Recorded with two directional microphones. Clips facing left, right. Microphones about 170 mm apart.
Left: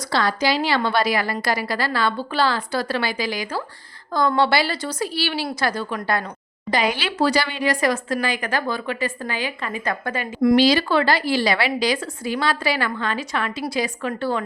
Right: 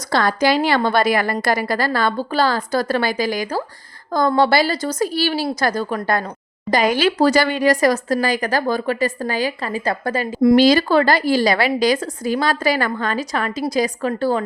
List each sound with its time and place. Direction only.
0.1 s a woman's voice: 50° right (ahead or behind)
10.5 s a woman's voice: 45° right (ahead or behind)